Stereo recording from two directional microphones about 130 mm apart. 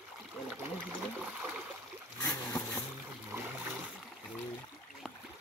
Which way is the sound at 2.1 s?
20° left (ahead or behind).